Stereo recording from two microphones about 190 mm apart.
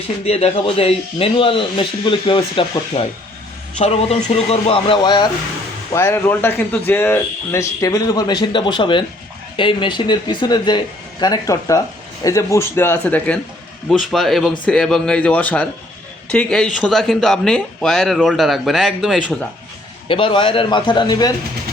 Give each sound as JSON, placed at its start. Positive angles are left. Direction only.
{"t": 0.3, "sound": "speech", "side_deg": 35}
{"t": 20.1, "sound": "speech", "side_deg": 25}